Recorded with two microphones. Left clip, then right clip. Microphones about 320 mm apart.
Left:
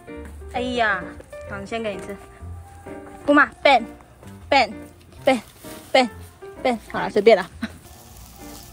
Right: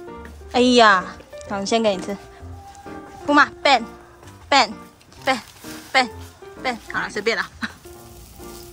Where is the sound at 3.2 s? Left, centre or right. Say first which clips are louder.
Even; centre.